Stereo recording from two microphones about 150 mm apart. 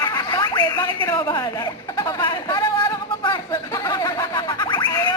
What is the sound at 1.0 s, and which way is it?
Speech, 30° left (ahead or behind).